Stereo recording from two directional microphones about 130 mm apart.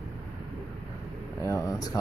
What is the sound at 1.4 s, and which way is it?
Speech, 25° left (ahead or behind).